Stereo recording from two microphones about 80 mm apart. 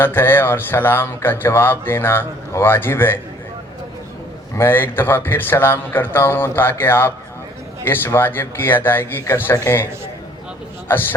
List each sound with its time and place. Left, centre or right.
0.0 s speech: left
4.5 s speech: left
10.8 s a man's voice: left